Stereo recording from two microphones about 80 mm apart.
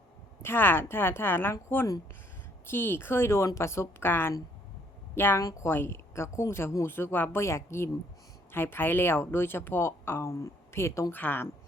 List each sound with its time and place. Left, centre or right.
0.4 s speech: left
2.6 s speech: left
5.4 s speech: left
5.6 s speech: left
11.1 s speech: left